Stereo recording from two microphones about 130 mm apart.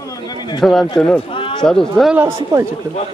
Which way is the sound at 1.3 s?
40° left (ahead or behind).